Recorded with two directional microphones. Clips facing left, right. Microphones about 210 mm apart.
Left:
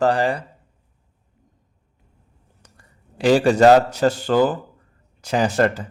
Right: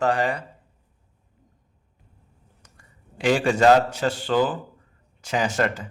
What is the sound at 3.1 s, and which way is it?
Speech, 35° left (ahead or behind).